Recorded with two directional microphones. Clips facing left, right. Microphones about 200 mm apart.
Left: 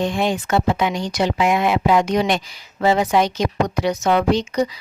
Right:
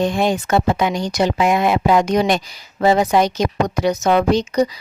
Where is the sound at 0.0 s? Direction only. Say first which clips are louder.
Right 3 dB; 40° right (ahead or behind).